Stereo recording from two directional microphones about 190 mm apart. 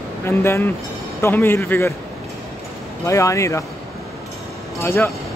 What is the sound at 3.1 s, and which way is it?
Speech, 15° left (ahead or behind).